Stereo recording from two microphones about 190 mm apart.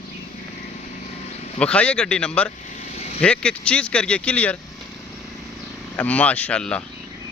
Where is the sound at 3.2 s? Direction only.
5° left (ahead or behind).